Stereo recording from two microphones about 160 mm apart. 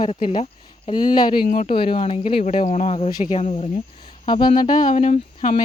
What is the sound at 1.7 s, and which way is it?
Speech, 35° left (ahead or behind).